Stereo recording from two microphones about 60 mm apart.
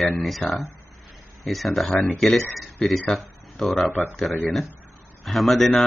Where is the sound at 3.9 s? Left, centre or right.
Left.